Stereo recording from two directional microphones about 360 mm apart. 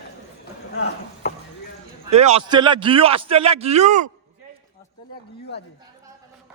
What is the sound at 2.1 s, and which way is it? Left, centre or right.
A man's voice, centre.